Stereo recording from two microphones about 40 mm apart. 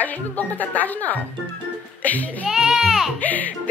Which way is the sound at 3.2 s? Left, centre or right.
Left.